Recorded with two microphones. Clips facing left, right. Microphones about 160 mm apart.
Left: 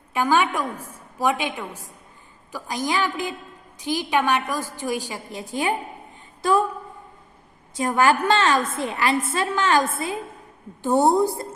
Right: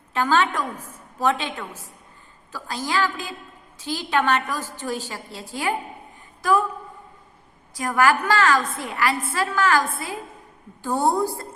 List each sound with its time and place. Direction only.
0.1 s a woman's voice: 10° left (ahead or behind); by 6.7 s 30° left (ahead or behind)
7.7 s a woman's voice: 25° left (ahead or behind)